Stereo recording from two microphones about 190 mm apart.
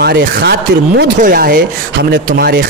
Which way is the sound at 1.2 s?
50° right (ahead or behind).